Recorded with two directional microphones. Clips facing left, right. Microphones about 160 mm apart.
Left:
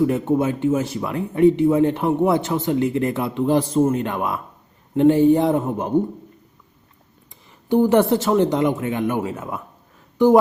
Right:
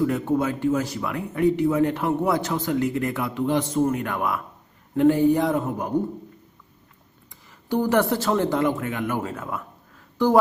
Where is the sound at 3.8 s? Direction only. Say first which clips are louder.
Left 3 dB; 25° left (ahead or behind).